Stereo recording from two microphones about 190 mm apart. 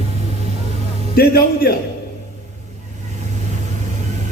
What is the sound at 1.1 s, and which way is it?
Speech, 50° left (ahead or behind).